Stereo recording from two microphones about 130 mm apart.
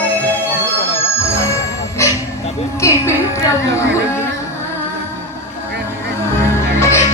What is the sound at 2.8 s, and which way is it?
Music, 20° left (ahead or behind).